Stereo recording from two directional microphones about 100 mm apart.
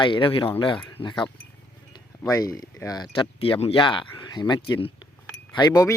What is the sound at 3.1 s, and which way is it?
Speech, 60° left (ahead or behind).